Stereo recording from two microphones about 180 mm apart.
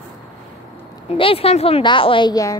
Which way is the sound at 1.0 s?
30° left (ahead or behind).